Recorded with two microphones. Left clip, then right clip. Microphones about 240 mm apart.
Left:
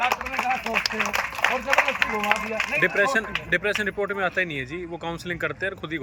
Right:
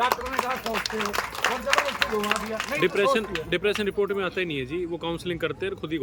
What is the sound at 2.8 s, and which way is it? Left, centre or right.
A man's voice, centre.